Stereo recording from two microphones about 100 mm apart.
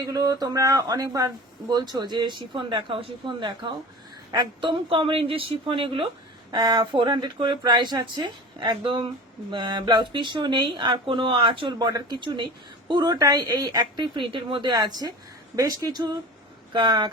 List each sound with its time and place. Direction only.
0.0 s a woman's voice: 40° right (ahead or behind); by 6.1 s 60° right (ahead or behind)
6.5 s speech: 45° right (ahead or behind)
11.9 s speech: 40° right (ahead or behind)
12.2 s speech: 50° right (ahead or behind)